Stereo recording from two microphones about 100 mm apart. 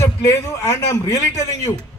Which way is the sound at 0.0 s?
30° left (ahead or behind).